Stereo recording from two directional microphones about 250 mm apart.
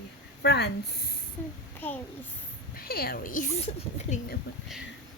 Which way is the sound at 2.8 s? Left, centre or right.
Left.